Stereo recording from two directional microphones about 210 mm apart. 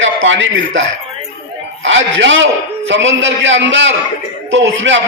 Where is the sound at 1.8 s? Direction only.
60° right (ahead or behind).